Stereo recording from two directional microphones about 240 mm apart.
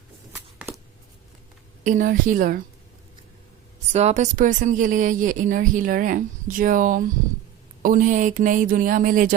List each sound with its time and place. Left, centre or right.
0.3 s a sound: centre
1.8 s speech: right
3.9 s speech: right